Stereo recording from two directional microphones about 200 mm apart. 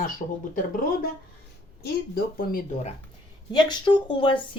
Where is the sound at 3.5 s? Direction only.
20° left (ahead or behind).